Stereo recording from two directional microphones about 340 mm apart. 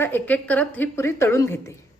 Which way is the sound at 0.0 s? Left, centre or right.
Centre.